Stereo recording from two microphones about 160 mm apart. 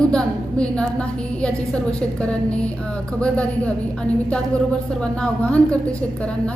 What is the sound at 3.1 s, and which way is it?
Speech, 5° left (ahead or behind).